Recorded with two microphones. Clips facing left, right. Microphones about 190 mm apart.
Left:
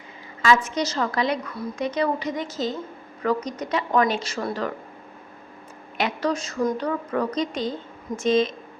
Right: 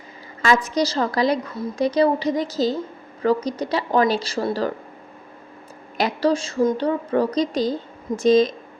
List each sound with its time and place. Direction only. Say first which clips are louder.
0.4 s a woman's voice: right 2 dB; 40° right (ahead or behind)
6.0 s a woman's voice: right 5 dB; 35° right (ahead or behind)